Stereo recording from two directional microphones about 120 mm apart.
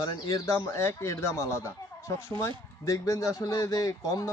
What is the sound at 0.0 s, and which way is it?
Speech, 30° left (ahead or behind).